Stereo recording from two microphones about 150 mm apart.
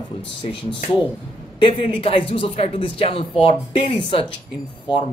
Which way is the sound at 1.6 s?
35° left (ahead or behind).